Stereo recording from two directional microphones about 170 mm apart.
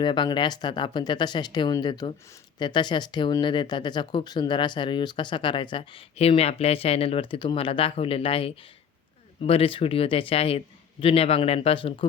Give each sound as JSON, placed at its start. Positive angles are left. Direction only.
{"t": 0.0, "sound": "speech", "side_deg": 25}